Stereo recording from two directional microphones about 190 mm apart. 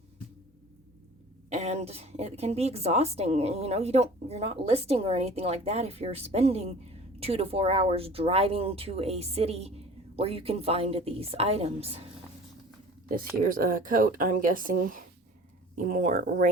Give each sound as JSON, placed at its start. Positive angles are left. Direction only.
{"t": 1.5, "sound": "a woman's voice", "side_deg": -35}
{"t": 13.1, "sound": "speech", "side_deg": -50}